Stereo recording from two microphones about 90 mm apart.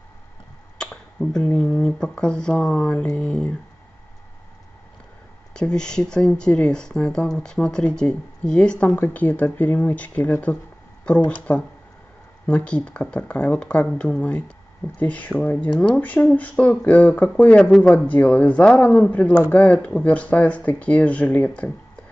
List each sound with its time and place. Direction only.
0.7 s finger snapping: 5° left (ahead or behind)
1.5 s speech: 10° left (ahead or behind)
5.5 s speech: 10° left (ahead or behind)
17.6 s speech: centre (ahead or behind)
17.9 s speech: 15° left (ahead or behind)